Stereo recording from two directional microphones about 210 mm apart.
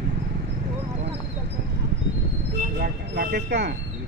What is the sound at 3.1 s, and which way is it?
Train, 50° right (ahead or behind).